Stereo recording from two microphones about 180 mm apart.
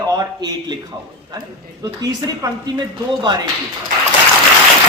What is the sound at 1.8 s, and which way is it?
Speech, 20° right (ahead or behind).